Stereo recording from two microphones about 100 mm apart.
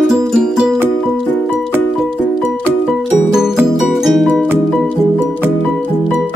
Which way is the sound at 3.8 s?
Centre (ahead or behind).